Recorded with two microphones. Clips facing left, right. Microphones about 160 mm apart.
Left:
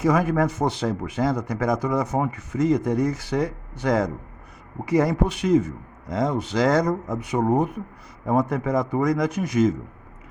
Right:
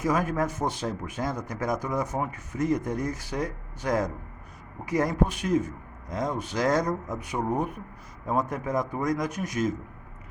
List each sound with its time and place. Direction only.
0.0 s speech: 75° left (ahead or behind)